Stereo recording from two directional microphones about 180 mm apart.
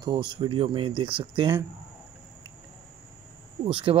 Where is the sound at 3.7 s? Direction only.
30° right (ahead or behind).